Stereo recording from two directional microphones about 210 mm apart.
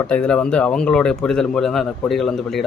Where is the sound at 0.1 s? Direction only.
5° left (ahead or behind).